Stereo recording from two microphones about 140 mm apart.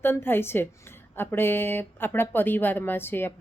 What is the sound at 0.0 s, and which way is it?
Speech, 15° left (ahead or behind).